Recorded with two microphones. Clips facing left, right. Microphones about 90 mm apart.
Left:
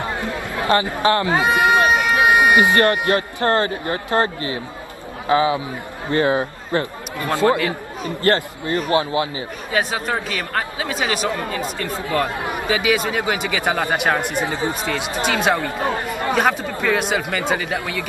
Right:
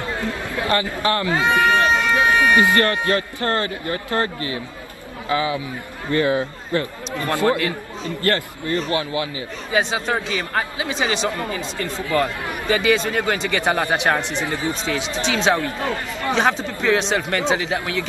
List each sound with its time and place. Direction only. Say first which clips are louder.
0.7 s speech: left 4 dB; 25° left (ahead or behind)
9.7 s speech: right 1 dB; 5° left (ahead or behind)
10.5 s speech: left 1 dB; 5° right (ahead or behind)
11.0 s speech: even; 5° left (ahead or behind)
12.1 s speech: even; 15° left (ahead or behind)
13.7 s speech: even; 5° right (ahead or behind)
13.9 s speech: left 1 dB; 10° left (ahead or behind)